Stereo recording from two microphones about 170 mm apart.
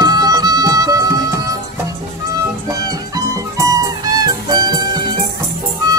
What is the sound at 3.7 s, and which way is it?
Music, 20° right (ahead or behind).